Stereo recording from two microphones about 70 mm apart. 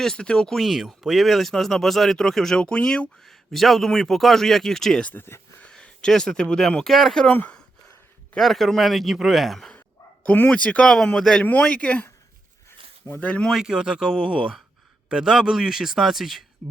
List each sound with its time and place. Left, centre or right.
0.0 s speech: centre
3.5 s speech: centre
5.0 s speech: left
5.6 s speech: centre
7.3 s speech: left
8.4 s speech: centre
10.2 s speech: centre
13.1 s speech: centre
13.5 s a man's voice: centre